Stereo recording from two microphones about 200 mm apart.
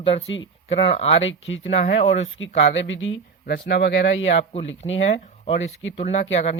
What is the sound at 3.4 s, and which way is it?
Speech, 55° left (ahead or behind).